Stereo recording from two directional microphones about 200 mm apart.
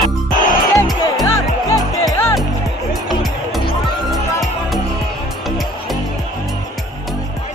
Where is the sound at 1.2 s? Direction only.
15° left (ahead or behind).